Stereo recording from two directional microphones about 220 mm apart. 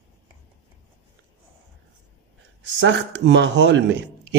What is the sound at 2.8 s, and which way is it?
A man's voice, 55° right (ahead or behind).